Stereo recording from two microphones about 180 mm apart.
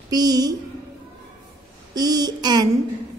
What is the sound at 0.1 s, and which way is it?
Speech, 20° right (ahead or behind).